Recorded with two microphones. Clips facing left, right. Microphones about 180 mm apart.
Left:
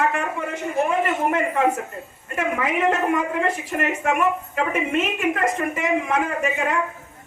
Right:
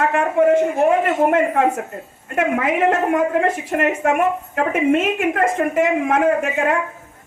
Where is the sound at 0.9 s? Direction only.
55° right (ahead or behind).